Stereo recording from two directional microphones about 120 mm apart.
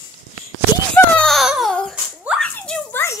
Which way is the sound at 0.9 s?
5° left (ahead or behind).